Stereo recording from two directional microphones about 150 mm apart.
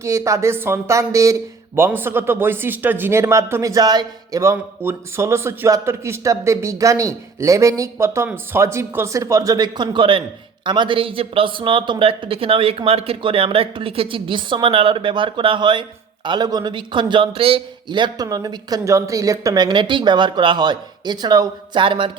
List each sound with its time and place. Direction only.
0.0 s speech: 20° right (ahead or behind)